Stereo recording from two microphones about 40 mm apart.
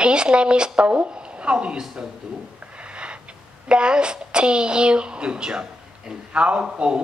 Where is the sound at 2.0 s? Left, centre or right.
Right.